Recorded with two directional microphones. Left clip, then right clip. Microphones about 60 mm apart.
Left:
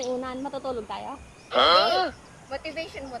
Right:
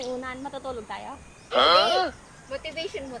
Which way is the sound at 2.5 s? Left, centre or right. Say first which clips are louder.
Right 1 dB; right.